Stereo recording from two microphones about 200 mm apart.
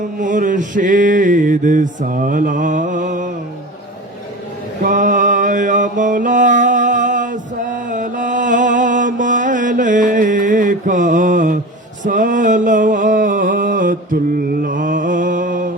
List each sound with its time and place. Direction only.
0.2 s mantra: 40° right (ahead or behind)
4.8 s mantra: 40° right (ahead or behind)
12.0 s a sound: 40° right (ahead or behind)
14.6 s mantra: 40° right (ahead or behind)